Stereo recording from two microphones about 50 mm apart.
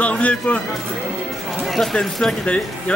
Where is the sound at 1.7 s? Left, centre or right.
Centre.